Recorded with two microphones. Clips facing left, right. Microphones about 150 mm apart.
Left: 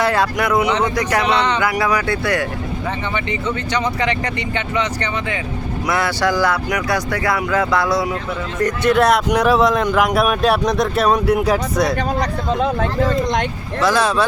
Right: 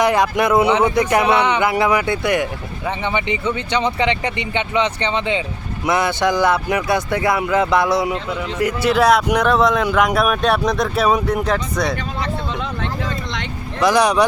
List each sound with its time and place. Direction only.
0.0 s speech: 20° right (ahead or behind)
0.7 s speech: 10° right (ahead or behind)
8.5 s speech: 5° right (ahead or behind)
11.9 s speech: 40° left (ahead or behind)
13.7 s speech: 15° right (ahead or behind)